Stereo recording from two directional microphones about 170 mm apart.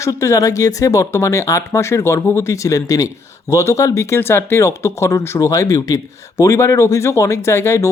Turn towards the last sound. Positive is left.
turn(degrees=15)  # may be behind; listen again after turning